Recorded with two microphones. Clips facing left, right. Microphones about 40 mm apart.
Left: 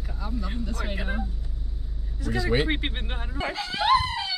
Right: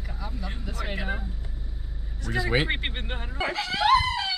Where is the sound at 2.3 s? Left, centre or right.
Centre.